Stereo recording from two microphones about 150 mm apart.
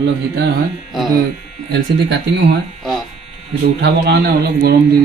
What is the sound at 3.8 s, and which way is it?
Speech, 90° right.